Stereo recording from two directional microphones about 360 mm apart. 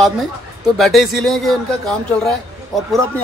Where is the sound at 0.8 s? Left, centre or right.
Centre.